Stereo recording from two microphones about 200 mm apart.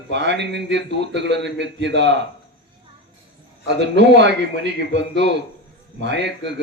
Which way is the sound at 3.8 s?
60° right (ahead or behind).